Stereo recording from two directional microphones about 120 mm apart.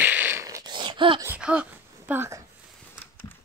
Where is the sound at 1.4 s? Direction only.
10° right (ahead or behind).